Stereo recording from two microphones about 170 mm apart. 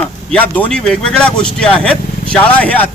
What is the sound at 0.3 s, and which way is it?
A man's voice, 10° left (ahead or behind).